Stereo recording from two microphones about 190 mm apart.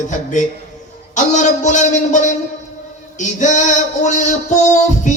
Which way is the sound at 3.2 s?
40° left (ahead or behind).